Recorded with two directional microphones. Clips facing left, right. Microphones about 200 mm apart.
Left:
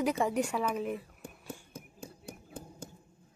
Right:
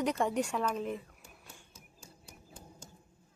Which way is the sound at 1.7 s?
55° left (ahead or behind).